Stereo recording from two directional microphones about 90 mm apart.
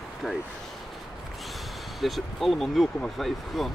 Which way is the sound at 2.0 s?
Centre (ahead or behind).